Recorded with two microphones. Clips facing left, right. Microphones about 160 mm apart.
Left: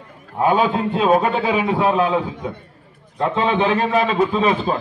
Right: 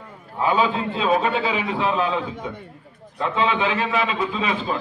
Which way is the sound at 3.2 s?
35° left (ahead or behind).